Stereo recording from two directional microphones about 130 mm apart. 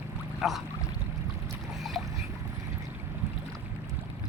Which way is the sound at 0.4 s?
Centre (ahead or behind).